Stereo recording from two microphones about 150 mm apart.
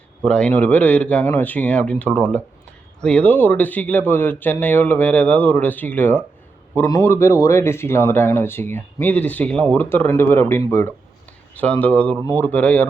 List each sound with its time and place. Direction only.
0.3 s speech: 5° left (ahead or behind)